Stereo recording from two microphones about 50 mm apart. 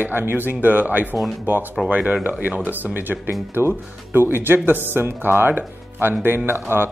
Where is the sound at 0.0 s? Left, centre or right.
Right.